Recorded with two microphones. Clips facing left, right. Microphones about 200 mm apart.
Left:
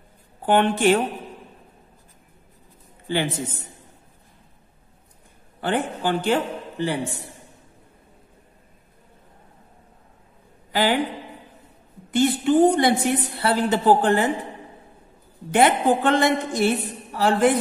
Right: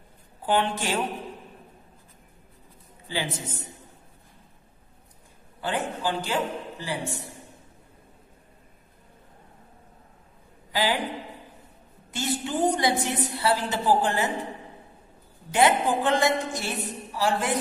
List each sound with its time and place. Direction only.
0.5 s a woman's voice: 60° left (ahead or behind)
5.6 s a woman's voice: 60° left (ahead or behind)
10.7 s speech: 60° left (ahead or behind)
12.1 s a woman's voice: 60° left (ahead or behind)
15.5 s a woman's voice: 60° left (ahead or behind)